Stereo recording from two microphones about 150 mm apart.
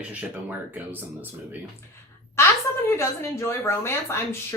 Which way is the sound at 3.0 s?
15° left (ahead or behind).